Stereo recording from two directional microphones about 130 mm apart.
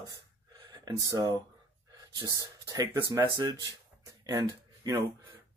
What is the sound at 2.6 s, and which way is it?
Speech, 30° right (ahead or behind).